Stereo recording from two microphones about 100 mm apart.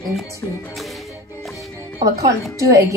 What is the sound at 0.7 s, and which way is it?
Music, centre (ahead or behind).